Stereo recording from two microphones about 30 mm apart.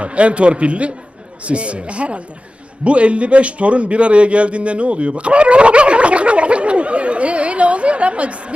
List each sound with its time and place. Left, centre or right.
0.0 s a man's voice: right